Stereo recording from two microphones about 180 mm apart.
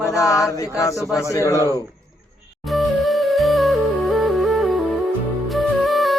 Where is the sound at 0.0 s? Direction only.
15° left (ahead or behind).